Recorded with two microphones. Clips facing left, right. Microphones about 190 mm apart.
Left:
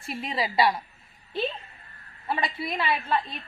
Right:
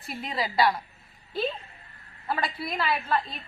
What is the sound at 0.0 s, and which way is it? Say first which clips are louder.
Speech: left 2 dB; 25° left (ahead or behind).